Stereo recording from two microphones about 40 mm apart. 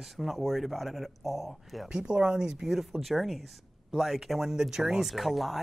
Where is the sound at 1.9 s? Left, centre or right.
Centre.